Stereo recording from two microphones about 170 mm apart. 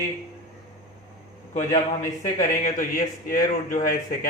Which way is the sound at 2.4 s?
50° left (ahead or behind).